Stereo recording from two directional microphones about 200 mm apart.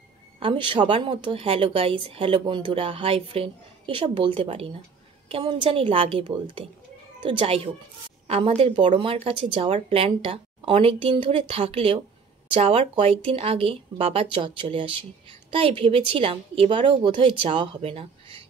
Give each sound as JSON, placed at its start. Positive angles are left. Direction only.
{"t": 0.4, "sound": "speech", "side_deg": -25}